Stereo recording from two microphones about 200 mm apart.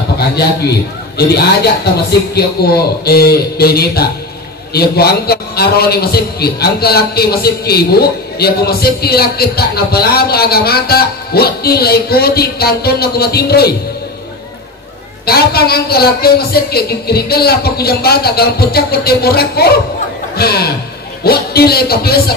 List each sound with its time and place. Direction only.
1.1 s a man's voice: 55° left (ahead or behind)
15.2 s a man's voice: 50° left (ahead or behind)